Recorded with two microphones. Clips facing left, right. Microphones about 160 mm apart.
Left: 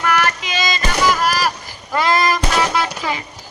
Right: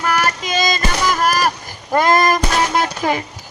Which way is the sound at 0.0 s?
35° right (ahead or behind).